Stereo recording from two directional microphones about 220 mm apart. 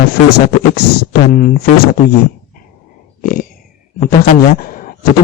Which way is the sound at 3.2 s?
40° left (ahead or behind).